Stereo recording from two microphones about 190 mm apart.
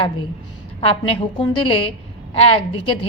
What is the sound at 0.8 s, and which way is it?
A woman's voice, 30° left (ahead or behind).